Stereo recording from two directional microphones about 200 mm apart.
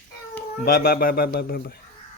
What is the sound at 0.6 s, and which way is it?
Speech, 50° left (ahead or behind).